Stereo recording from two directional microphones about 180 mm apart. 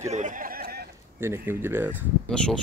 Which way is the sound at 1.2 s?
15° right (ahead or behind).